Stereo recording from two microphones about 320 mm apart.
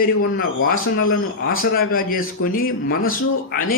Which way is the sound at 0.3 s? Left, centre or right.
Left.